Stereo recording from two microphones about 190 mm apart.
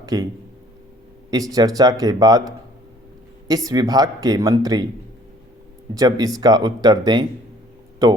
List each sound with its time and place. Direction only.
0.0 s speech: 20° right (ahead or behind)
1.3 s speech: 20° right (ahead or behind)
3.5 s speech: 20° right (ahead or behind)
5.9 s speech: 20° right (ahead or behind)